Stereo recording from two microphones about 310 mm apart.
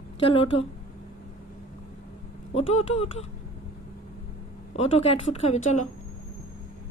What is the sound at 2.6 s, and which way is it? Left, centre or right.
Speech, left.